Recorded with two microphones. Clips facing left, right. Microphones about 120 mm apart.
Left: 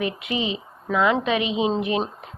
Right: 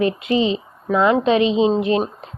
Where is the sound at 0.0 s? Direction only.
15° left (ahead or behind).